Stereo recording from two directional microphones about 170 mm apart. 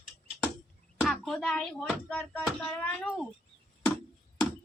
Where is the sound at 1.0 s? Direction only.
Centre (ahead or behind).